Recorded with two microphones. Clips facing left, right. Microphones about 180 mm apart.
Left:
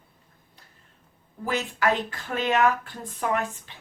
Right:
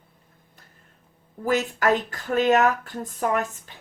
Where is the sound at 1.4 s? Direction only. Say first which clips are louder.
Right 3 dB; 45° right (ahead or behind).